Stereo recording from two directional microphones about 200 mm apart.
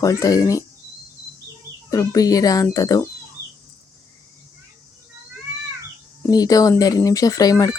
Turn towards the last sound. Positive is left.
turn(degrees=20)  # may be behind; listen again after turning